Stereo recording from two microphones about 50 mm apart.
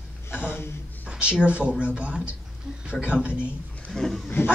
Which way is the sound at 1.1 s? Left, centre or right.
Right.